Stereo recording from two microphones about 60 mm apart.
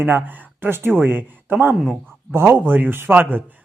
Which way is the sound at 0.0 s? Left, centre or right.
Right.